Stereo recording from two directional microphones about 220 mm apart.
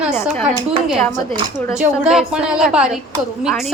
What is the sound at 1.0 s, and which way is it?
Cutlery, 10° left (ahead or behind).